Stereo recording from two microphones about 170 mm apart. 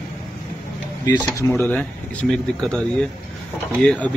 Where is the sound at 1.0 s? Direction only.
15° left (ahead or behind).